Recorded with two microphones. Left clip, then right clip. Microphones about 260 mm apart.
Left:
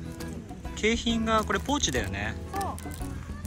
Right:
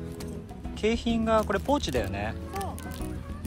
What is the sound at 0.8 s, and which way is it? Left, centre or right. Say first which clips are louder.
Speech: left 1 dB; centre.